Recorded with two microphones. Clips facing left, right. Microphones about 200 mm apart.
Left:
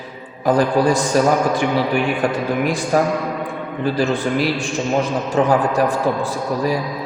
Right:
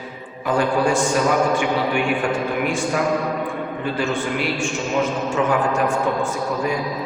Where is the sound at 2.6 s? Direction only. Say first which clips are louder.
Left 4 dB; 40° left (ahead or behind).